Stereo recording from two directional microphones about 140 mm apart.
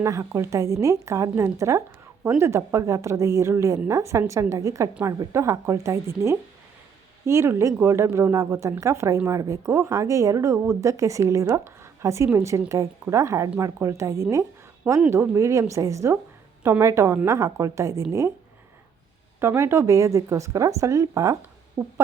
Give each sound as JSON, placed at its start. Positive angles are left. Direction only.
{"t": 0.0, "sound": "speech", "side_deg": -20}
{"t": 19.4, "sound": "speech", "side_deg": -20}